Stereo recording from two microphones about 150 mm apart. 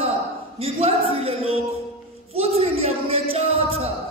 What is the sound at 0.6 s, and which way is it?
Speech, 40° right (ahead or behind).